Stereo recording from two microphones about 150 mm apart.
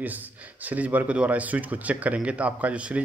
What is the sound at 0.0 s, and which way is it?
Speech, 10° right (ahead or behind).